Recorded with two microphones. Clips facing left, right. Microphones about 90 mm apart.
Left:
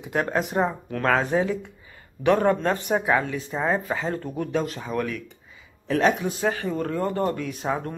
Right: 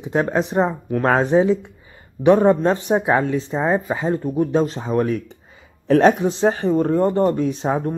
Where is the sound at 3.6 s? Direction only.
15° right (ahead or behind).